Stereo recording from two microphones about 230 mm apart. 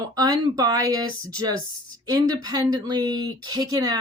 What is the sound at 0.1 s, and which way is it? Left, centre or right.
Speech, centre.